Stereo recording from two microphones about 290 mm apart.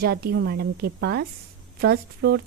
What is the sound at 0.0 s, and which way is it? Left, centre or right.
A woman's voice, right.